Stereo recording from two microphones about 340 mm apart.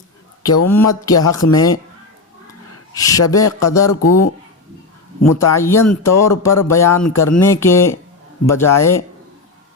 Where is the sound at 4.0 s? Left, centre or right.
Left.